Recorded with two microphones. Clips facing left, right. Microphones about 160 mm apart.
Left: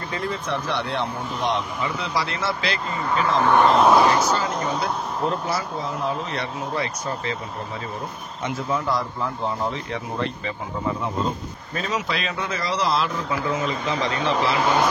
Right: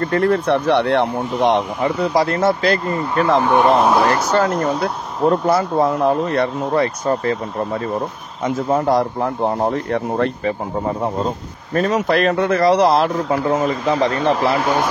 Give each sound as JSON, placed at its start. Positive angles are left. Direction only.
{"t": 0.0, "sound": "speech", "side_deg": -65}
{"t": 3.8, "sound": "speech", "side_deg": -5}
{"t": 4.3, "sound": "a man's voice", "side_deg": -60}
{"t": 8.4, "sound": "a man's voice", "side_deg": -45}